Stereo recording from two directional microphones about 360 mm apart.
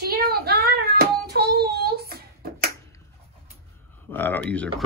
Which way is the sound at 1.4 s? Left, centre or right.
Right.